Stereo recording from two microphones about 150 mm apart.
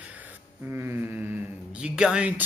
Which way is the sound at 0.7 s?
15° right (ahead or behind).